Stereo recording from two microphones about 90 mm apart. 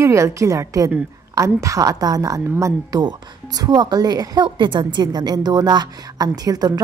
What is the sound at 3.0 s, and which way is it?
A woman's voice, 50° right (ahead or behind).